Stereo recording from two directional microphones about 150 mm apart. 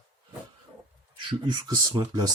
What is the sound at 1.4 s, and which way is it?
Speech, 25° right (ahead or behind).